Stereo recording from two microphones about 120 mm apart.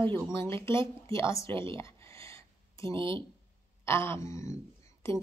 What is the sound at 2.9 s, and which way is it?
Speech, 45° right (ahead or behind).